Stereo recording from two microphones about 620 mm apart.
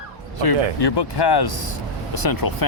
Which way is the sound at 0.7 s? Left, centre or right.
Left.